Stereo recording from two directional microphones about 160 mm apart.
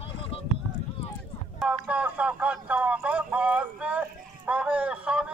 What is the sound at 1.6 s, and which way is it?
Speech, 5° right (ahead or behind).